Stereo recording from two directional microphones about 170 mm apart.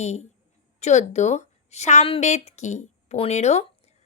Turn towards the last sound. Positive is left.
turn(degrees=40)  # may be behind; listen again after turning